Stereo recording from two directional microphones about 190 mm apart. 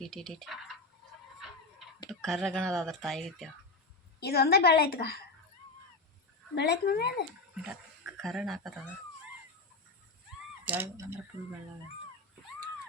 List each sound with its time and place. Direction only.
0.0 s speech: centre (ahead or behind)
2.0 s speech: centre (ahead or behind)
4.2 s a woman's voice: 55° left (ahead or behind)
6.6 s a woman's voice: 60° left (ahead or behind)
7.5 s a sound: 5° right (ahead or behind)
8.2 s speech: centre (ahead or behind)
10.7 s speech: 15° right (ahead or behind)